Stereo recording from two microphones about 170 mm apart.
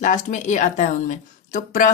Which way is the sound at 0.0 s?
50° left (ahead or behind).